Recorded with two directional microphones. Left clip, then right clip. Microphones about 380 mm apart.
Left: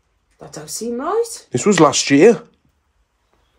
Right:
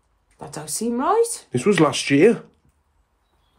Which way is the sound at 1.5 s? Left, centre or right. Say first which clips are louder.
Left 6 dB; centre.